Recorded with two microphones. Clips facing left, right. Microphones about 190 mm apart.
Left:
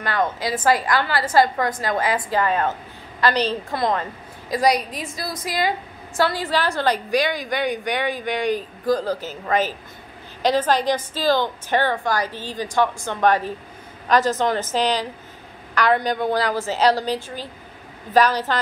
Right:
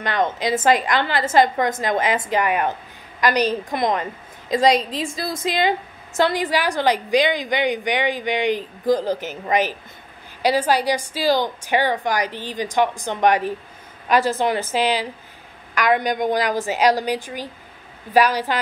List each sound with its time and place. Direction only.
0.0 s a woman's voice: 20° right (ahead or behind)